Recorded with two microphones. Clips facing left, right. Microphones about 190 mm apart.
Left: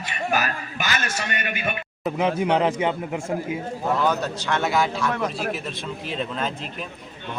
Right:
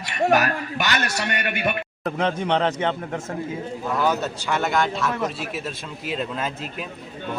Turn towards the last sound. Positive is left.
turn(degrees=-5)  # may be behind; listen again after turning